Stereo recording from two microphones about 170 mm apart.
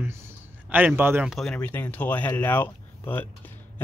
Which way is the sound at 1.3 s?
5° left (ahead or behind).